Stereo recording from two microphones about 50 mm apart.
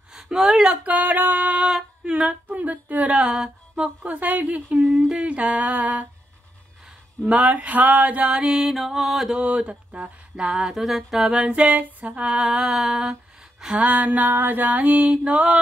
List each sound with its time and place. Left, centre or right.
0.1 s speech: centre
0.8 s speech: right
1.6 s female singing: centre
2.5 s speech: right
5.1 s speech: right
7.2 s speech: right
8.3 s a sound: centre
9.3 s speech: right
10.0 s a sound: centre
11.2 s speech: right
11.7 s speech: right
12.2 s a sound: centre
13.7 s speech: right